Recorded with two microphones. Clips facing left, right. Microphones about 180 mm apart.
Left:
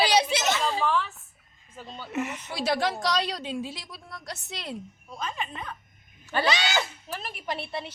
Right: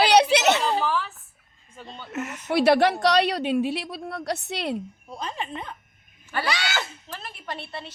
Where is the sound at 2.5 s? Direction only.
65° right (ahead or behind).